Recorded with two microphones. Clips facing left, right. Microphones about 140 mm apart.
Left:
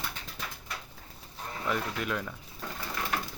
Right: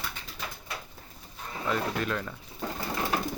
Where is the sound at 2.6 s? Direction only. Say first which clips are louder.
Right 5 dB; 30° right (ahead or behind).